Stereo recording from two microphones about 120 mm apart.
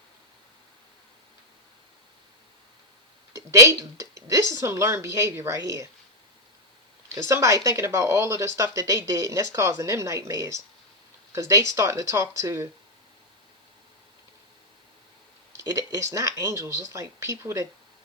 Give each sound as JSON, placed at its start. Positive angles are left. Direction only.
{"t": 3.3, "sound": "speech", "side_deg": -25}
{"t": 7.1, "sound": "speech", "side_deg": -25}
{"t": 15.5, "sound": "a sound", "side_deg": -30}
{"t": 15.9, "sound": "speech", "side_deg": -25}